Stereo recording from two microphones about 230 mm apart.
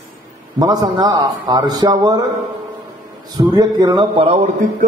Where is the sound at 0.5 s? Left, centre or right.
Centre.